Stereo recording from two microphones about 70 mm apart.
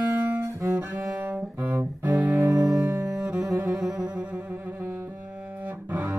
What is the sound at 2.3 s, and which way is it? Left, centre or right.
Music, right.